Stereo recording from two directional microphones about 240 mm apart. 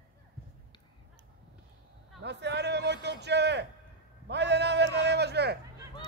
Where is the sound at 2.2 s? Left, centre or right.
Right.